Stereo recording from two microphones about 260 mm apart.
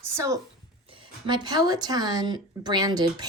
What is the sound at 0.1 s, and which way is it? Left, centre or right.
Speech, centre.